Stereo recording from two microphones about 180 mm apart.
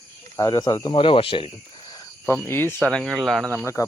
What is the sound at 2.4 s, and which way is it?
Speech, 10° left (ahead or behind).